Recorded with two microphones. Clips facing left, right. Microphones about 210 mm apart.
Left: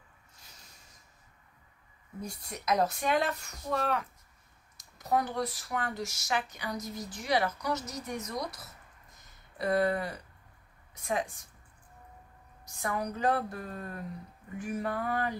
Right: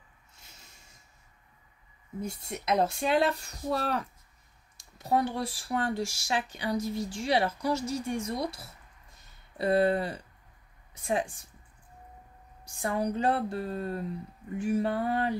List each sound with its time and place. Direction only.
2.2 s speech: 25° right (ahead or behind)
12.6 s speech: 30° right (ahead or behind)